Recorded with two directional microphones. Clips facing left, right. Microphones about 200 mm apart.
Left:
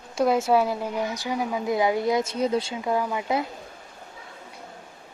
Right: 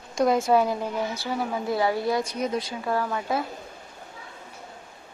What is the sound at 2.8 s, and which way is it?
Speech, 15° left (ahead or behind).